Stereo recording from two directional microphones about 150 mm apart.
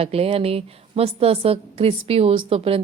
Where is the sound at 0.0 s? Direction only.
40° right (ahead or behind).